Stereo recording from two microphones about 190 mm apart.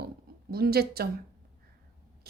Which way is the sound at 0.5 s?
55° right (ahead or behind).